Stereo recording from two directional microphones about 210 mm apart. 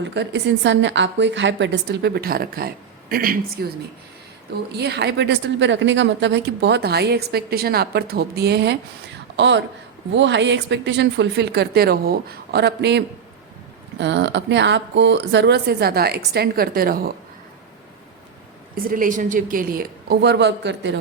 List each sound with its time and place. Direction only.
0.0 s a woman's voice: 55° right (ahead or behind)
4.8 s a woman's voice: 50° right (ahead or behind)
18.7 s a woman's voice: 40° right (ahead or behind)